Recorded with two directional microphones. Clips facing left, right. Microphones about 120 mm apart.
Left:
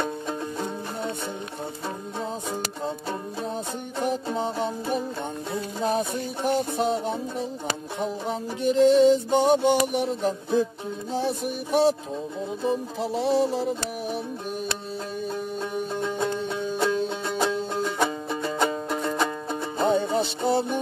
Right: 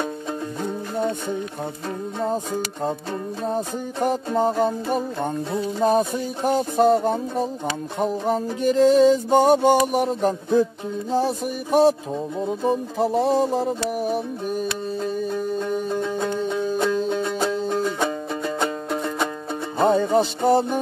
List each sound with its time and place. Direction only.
2.2 s music: 50° right (ahead or behind)
5.9 s music: 45° right (ahead or behind)
15.9 s music: centre (ahead or behind)
17.9 s music: 5° left (ahead or behind)
19.9 s music: 45° right (ahead or behind)